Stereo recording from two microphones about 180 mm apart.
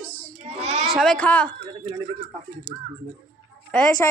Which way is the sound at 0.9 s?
5° left (ahead or behind).